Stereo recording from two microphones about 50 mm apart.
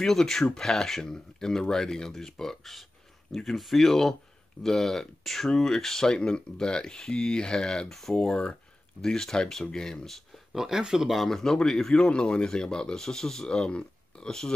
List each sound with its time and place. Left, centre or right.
0.0 s speech: centre
10.0 s speech: centre
10.5 s speech: centre